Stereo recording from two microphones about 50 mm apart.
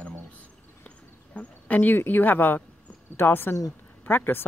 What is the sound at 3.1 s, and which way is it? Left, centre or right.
A woman's voice, left.